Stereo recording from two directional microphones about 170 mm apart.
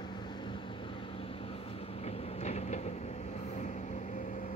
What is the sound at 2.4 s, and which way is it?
Train, 40° left (ahead or behind).